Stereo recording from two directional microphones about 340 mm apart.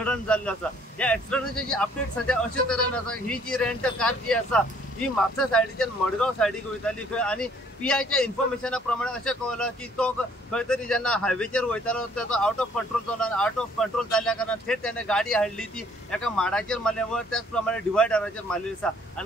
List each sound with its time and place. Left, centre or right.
0.0 s speech: centre